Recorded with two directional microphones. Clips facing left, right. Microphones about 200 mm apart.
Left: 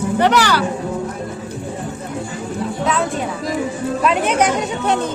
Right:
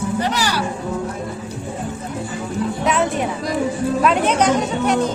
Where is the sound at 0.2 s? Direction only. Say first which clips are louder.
Left 6 dB; 65° left (ahead or behind).